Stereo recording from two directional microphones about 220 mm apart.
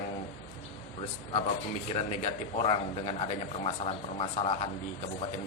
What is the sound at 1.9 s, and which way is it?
Speech, 30° left (ahead or behind).